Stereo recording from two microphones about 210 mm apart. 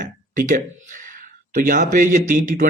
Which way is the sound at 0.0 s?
40° right (ahead or behind).